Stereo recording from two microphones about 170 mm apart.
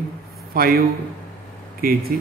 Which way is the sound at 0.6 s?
60° right (ahead or behind).